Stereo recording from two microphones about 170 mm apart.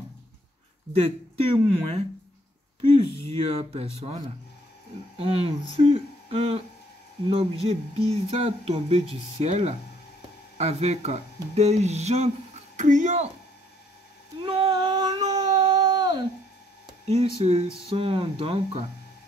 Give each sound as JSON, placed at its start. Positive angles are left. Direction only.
{"t": 0.9, "sound": "speech", "side_deg": -35}
{"t": 3.3, "sound": "speech", "side_deg": -35}
{"t": 5.8, "sound": "a sound", "side_deg": -35}
{"t": 7.2, "sound": "speech", "side_deg": -35}
{"t": 14.4, "sound": "cat", "side_deg": -30}
{"t": 17.4, "sound": "speech", "side_deg": -35}